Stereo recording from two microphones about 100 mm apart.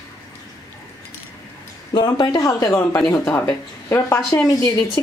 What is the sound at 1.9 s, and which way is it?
Speech, 45° left (ahead or behind).